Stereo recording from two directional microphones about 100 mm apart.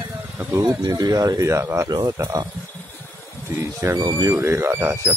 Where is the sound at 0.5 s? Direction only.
35° right (ahead or behind).